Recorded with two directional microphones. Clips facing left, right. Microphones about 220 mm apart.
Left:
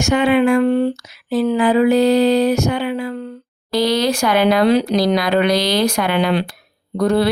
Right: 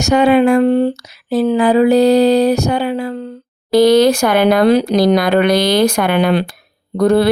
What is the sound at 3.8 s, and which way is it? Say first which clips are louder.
Speech: right 7 dB; 50° right (ahead or behind).